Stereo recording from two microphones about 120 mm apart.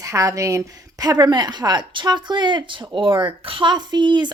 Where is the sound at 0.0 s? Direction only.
25° right (ahead or behind).